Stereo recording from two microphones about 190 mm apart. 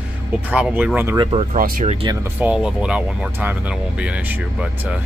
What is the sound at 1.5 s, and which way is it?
Speech, 40° right (ahead or behind).